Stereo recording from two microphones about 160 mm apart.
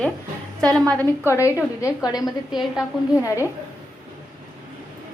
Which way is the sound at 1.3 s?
20° left (ahead or behind).